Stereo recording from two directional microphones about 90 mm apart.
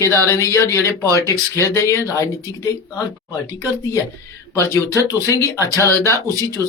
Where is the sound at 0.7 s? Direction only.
30° left (ahead or behind).